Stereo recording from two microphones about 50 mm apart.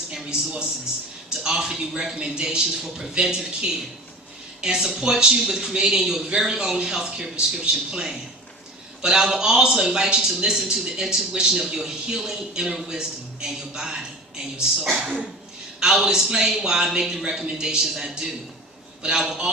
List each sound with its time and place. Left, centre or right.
0.1 s a man's voice: centre